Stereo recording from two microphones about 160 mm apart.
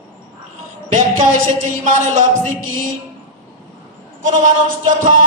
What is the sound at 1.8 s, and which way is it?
Music, 50° right (ahead or behind).